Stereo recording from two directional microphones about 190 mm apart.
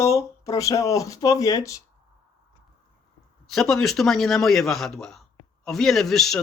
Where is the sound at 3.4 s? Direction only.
Centre (ahead or behind).